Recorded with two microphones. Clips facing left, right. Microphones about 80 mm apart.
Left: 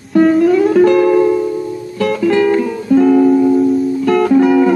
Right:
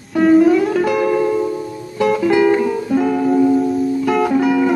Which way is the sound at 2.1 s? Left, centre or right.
Centre.